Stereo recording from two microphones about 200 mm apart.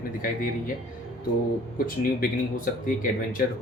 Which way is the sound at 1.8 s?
45° left (ahead or behind).